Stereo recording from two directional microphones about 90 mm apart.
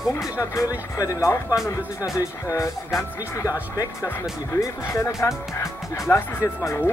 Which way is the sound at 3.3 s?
35° left (ahead or behind).